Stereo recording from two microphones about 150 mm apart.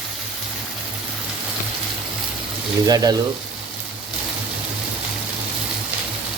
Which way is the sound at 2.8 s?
25° right (ahead or behind).